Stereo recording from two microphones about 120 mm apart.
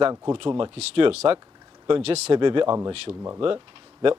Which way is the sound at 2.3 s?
45° right (ahead or behind).